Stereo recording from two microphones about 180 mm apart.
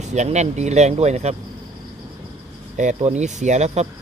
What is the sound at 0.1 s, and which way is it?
Speech, 40° right (ahead or behind).